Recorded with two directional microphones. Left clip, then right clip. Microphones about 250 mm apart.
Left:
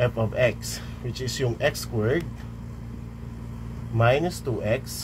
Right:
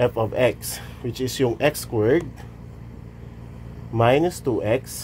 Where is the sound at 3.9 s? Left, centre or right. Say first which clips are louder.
Right 4 dB; right.